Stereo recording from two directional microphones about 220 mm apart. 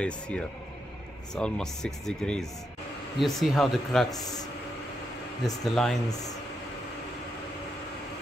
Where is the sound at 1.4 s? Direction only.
5° left (ahead or behind).